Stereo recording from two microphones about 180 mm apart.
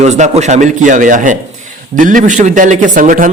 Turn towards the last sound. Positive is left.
turn(degrees=-45)  # may be behind; listen again after turning